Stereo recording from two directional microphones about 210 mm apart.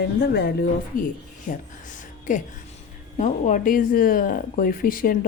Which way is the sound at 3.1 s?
35° left (ahead or behind).